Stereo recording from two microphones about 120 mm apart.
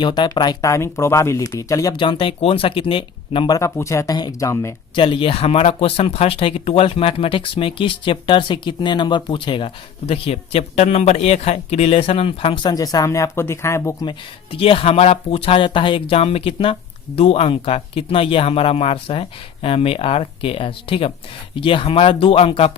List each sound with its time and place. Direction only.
0.0 s speech: 40° left (ahead or behind)
0.7 s speech: 20° left (ahead or behind)
1.9 s speech: 45° left (ahead or behind)
3.6 s speech: 25° left (ahead or behind)
4.9 s speech: 45° left (ahead or behind)
12.7 s speech: 30° left (ahead or behind)
14.0 s speech: 45° left (ahead or behind)